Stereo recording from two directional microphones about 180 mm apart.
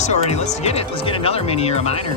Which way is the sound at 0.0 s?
40° left (ahead or behind).